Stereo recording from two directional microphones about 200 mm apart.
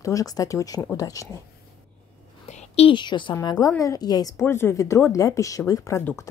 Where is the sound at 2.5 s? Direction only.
30° left (ahead or behind).